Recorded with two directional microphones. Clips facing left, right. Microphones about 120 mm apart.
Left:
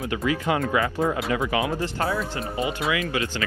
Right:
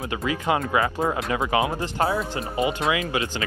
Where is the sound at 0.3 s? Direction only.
30° right (ahead or behind).